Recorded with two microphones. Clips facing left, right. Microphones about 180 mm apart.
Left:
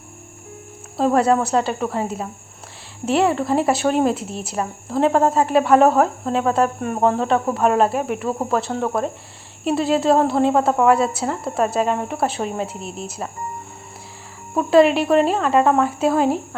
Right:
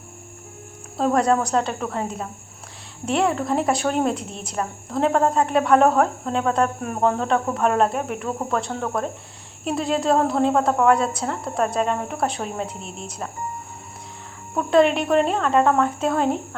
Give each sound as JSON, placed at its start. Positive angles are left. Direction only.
{"t": 0.9, "sound": "a woman's voice", "side_deg": 0}
{"t": 14.5, "sound": "a woman's voice", "side_deg": 5}